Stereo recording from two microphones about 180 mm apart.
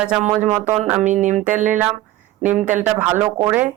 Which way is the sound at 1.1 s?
Centre (ahead or behind).